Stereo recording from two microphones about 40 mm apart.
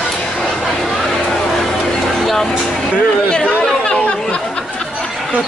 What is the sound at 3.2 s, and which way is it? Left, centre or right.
Chatter, left.